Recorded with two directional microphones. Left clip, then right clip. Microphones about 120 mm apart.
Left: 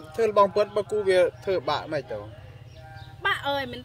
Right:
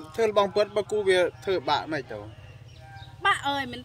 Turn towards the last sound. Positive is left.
turn(degrees=-55)  # may be behind; listen again after turning